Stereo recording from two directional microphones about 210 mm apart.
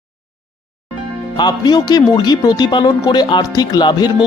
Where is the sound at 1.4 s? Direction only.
20° left (ahead or behind).